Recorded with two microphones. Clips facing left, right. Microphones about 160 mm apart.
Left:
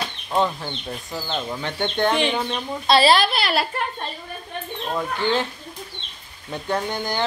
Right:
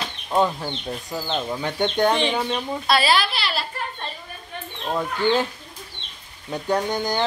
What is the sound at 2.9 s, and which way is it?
Speech, 35° left (ahead or behind).